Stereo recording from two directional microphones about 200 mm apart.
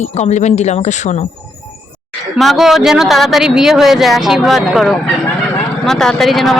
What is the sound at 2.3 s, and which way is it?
Speech, centre (ahead or behind).